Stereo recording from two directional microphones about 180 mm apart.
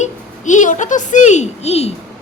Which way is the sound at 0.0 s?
45° left (ahead or behind).